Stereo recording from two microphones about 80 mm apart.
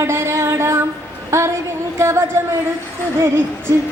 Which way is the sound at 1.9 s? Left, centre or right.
Right.